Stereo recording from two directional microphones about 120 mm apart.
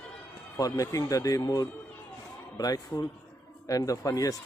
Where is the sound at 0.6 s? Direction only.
30° left (ahead or behind).